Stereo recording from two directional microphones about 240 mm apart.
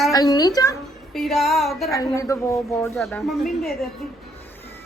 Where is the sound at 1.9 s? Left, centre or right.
Centre.